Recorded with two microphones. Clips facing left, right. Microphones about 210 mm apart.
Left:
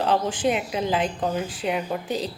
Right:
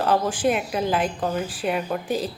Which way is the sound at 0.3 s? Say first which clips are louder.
Right 1 dB; 20° left (ahead or behind).